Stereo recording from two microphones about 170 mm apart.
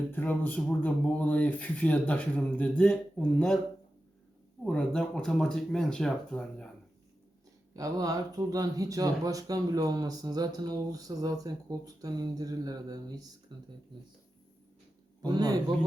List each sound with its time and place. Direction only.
0.1 s speech: 10° left (ahead or behind)
4.6 s speech: 5° left (ahead or behind)
7.7 s speech: 20° right (ahead or behind)
15.3 s speech: 25° right (ahead or behind)